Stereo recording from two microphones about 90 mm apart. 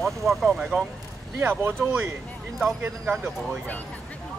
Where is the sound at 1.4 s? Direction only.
25° right (ahead or behind).